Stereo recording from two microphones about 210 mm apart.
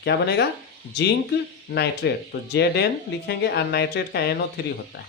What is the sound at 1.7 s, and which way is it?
Speech, 55° left (ahead or behind).